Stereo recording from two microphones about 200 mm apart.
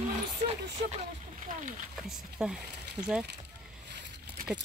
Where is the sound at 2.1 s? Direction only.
5° right (ahead or behind).